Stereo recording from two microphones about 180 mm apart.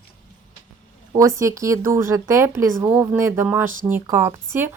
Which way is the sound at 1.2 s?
20° right (ahead or behind).